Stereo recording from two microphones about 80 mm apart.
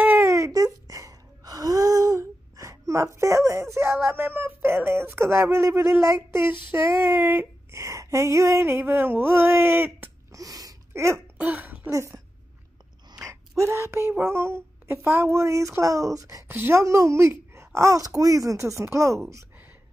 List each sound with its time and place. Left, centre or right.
0.2 s wail: right
3.2 s speech: right
6.7 s child singing: right
7.7 s speech: right
10.3 s a sound: right
10.9 s a sound: right
11.3 s speech: right
11.9 s speech: right
13.2 s a sound: right
14.1 s speech: right
16.4 s child singing: right
16.8 s speech: right